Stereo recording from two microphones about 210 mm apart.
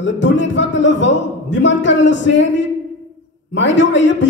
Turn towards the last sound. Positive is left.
turn(degrees=60)  # may be behind; listen again after turning